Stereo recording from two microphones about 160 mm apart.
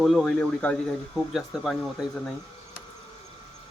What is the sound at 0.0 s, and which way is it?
Speech, centre (ahead or behind).